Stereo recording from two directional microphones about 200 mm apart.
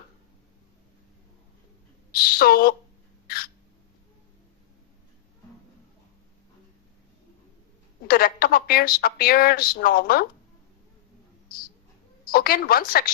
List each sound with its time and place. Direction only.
2.1 s speech: 50° left (ahead or behind)
3.2 s a sound: 50° left (ahead or behind)
8.0 s a woman's voice: 50° left (ahead or behind)
12.3 s a woman's voice: 50° left (ahead or behind)